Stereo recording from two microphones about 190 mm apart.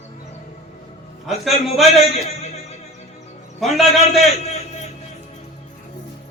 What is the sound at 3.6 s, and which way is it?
Speech, centre (ahead or behind).